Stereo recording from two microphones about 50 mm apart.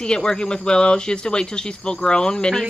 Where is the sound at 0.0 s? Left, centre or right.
Centre.